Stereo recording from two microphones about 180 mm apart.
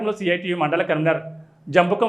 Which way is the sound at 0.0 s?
Centre (ahead or behind).